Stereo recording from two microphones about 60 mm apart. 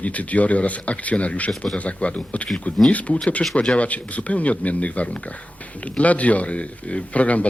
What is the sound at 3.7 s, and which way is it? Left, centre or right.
Speech, left.